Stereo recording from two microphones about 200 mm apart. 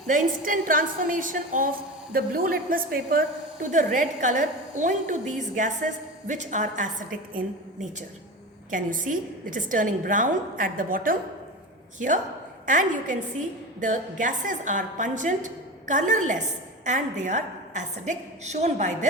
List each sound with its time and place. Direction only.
0.1 s a woman's voice: 40° right (ahead or behind)